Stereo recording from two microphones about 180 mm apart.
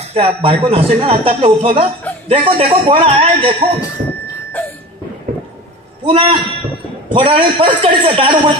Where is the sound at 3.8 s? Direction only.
20° left (ahead or behind).